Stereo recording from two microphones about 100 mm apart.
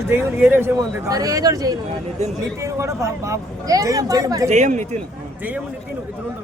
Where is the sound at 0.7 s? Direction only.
35° right (ahead or behind).